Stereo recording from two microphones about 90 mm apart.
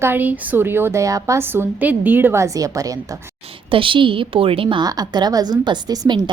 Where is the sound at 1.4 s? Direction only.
25° right (ahead or behind).